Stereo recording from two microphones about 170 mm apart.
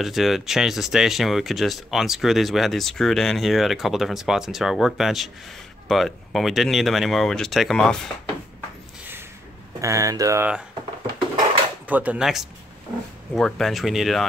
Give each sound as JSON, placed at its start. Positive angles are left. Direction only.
{"t": 0.0, "sound": "speech", "side_deg": 0}
{"t": 9.8, "sound": "speech", "side_deg": -20}
{"t": 11.9, "sound": "speech", "side_deg": -10}